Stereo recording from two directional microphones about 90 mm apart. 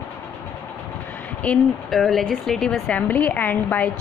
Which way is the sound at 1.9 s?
Centre (ahead or behind).